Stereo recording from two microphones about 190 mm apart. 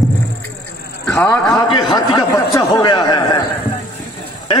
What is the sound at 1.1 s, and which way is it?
A man's voice, 15° left (ahead or behind).